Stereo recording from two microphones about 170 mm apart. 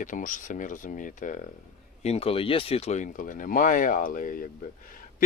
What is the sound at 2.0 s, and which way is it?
Speech, 35° left (ahead or behind).